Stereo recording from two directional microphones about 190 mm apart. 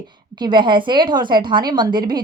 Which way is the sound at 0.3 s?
25° right (ahead or behind).